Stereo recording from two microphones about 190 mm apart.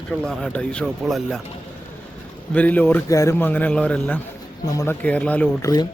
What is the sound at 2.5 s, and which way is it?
A man's voice, 5° left (ahead or behind).